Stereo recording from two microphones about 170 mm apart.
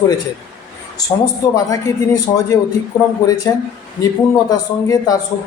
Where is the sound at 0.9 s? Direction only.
20° left (ahead or behind).